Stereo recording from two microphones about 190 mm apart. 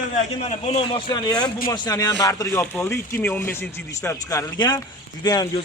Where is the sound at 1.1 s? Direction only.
20° left (ahead or behind).